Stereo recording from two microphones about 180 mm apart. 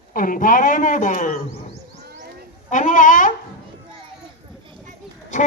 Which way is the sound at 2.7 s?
45° left (ahead or behind).